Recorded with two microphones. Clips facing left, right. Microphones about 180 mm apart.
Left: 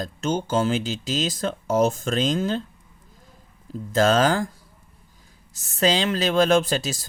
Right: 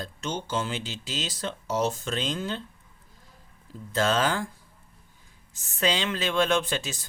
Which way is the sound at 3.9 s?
45° left (ahead or behind).